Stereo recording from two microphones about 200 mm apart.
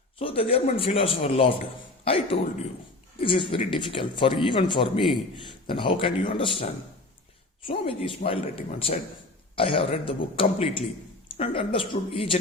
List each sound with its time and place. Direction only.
0.2 s speech: 25° left (ahead or behind)
7.7 s speech: 25° left (ahead or behind)